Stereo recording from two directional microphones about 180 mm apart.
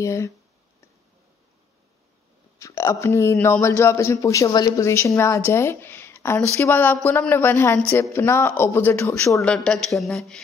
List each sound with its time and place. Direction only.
0.0 s speech: 15° left (ahead or behind)
2.6 s speech: 15° left (ahead or behind)